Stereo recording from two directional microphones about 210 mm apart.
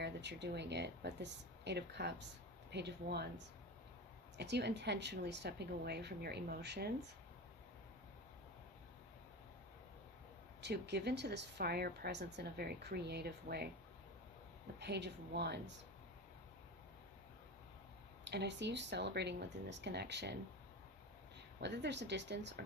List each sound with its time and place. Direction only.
0.0 s a woman's voice: 55° right (ahead or behind)
10.6 s a woman's voice: 55° right (ahead or behind)
14.8 s a woman's voice: 55° right (ahead or behind)
18.3 s speech: 55° right (ahead or behind)
21.6 s speech: 55° right (ahead or behind)